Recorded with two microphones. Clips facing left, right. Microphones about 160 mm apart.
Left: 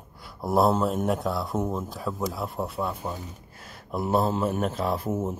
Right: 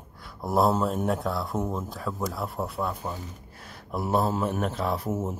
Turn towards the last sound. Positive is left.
turn(degrees=-5)  # may be behind; listen again after turning